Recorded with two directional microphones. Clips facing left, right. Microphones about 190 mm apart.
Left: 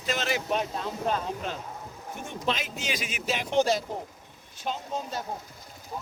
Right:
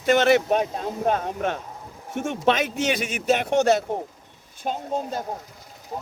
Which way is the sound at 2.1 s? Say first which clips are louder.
Right 9 dB; 75° right (ahead or behind).